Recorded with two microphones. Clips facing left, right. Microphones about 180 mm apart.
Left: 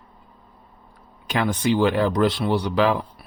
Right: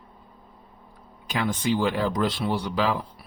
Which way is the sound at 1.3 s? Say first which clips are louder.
Left 4 dB; 65° left (ahead or behind).